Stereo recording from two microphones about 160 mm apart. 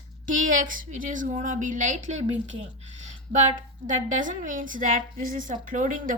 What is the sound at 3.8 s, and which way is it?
A woman's voice, 55° right (ahead or behind).